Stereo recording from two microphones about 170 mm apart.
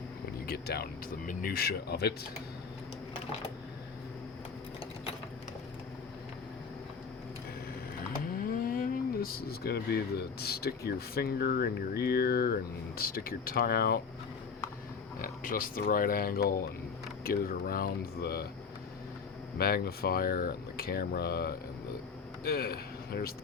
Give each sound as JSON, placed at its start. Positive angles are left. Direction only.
{"t": 0.4, "sound": "speech", "side_deg": 65}
{"t": 8.4, "sound": "speech", "side_deg": 60}
{"t": 15.2, "sound": "speech", "side_deg": 55}
{"t": 19.5, "sound": "speech", "side_deg": 60}